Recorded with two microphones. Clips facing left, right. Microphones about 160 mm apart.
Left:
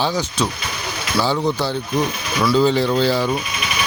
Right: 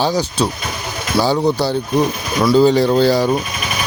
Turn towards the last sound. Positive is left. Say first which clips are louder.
# right 4 dB
turn(degrees=-40)  # may be behind; listen again after turning